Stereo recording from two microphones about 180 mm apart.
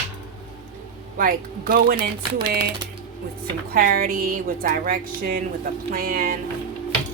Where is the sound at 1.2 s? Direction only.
55° right (ahead or behind).